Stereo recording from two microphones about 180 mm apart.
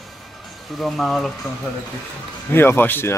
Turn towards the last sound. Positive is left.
turn(degrees=10)  # may be behind; listen again after turning